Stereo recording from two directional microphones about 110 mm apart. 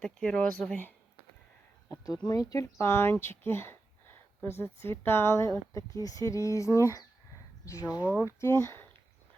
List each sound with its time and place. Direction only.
0.0 s speech: 10° left (ahead or behind)
2.2 s speech: 35° left (ahead or behind)